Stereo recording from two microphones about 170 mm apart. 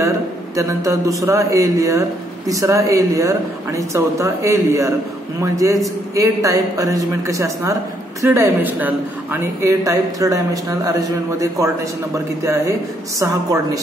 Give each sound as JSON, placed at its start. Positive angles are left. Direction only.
{"t": 0.6, "sound": "a woman's voice", "side_deg": -20}